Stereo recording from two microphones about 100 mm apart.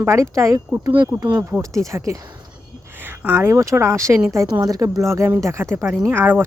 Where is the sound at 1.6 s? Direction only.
30° right (ahead or behind).